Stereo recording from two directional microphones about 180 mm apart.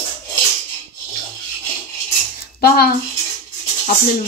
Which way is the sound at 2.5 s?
60° left (ahead or behind).